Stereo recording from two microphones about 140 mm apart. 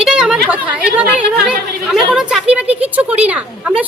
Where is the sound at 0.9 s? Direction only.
5° right (ahead or behind).